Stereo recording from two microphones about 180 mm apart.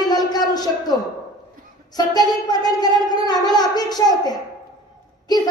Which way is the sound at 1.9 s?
20° left (ahead or behind).